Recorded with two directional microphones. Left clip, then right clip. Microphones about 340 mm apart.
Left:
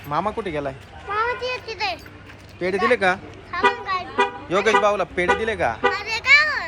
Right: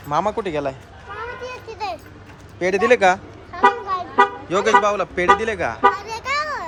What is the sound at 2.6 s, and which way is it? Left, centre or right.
Speech, centre.